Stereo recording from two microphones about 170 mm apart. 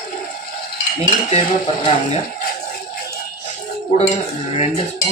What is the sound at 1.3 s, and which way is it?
Stir, 40° left (ahead or behind).